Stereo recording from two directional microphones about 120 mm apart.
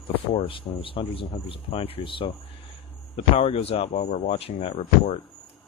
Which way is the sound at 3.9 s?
75° left (ahead or behind).